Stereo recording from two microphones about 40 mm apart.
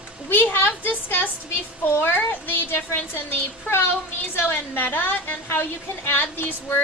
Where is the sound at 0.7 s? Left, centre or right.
Left.